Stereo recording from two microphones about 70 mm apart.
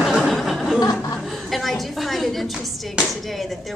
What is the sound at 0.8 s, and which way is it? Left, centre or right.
Speech, left.